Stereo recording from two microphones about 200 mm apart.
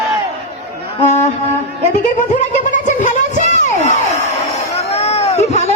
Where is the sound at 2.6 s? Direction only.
40° left (ahead or behind).